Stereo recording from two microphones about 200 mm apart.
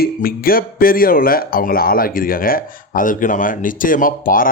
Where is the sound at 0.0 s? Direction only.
45° left (ahead or behind).